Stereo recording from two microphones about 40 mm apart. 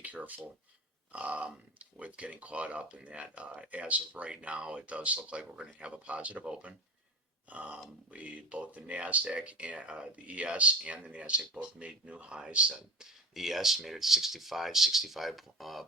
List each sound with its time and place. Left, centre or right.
0.0 s speech: right
3.1 s speech: right
3.3 s speech: right
7.4 s a sound: right
8.1 s speech: right
13.0 s speech: centre